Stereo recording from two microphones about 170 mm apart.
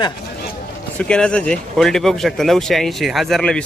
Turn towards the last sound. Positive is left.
turn(degrees=5)  # may be behind; listen again after turning